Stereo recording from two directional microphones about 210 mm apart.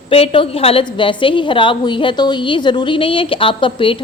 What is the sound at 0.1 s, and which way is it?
A woman's voice, 25° left (ahead or behind).